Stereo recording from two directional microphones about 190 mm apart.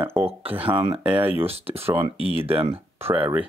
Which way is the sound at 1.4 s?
30° right (ahead or behind).